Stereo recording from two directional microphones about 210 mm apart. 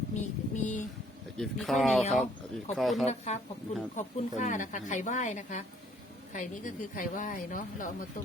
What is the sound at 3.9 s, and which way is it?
A woman's voice, 35° left (ahead or behind).